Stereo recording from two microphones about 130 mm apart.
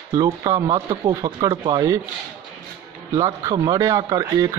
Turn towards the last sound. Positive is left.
turn(degrees=-30)  # may be behind; listen again after turning